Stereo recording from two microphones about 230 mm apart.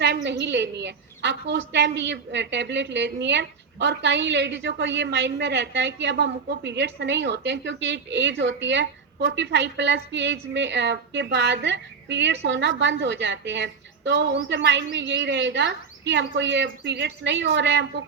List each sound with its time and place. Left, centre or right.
0.0 s a woman's voice: right